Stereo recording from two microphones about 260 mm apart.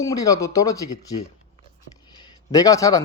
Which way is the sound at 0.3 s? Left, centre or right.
Centre.